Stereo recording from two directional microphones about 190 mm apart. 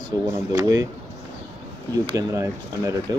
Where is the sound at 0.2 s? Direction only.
20° right (ahead or behind).